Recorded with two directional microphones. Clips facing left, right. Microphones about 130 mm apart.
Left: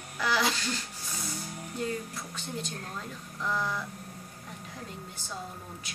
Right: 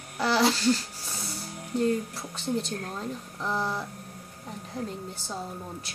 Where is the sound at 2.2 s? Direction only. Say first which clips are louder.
Right 7 dB; 30° right (ahead or behind).